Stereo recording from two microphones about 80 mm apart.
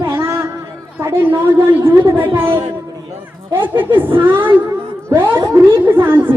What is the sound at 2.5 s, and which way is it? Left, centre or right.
Speech, right.